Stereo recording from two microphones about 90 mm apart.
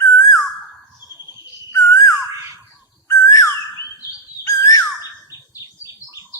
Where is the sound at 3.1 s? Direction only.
40° left (ahead or behind).